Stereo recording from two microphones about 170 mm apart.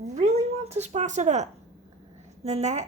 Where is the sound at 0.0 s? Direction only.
40° right (ahead or behind).